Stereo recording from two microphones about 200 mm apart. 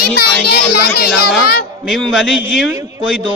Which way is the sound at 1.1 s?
Centre (ahead or behind).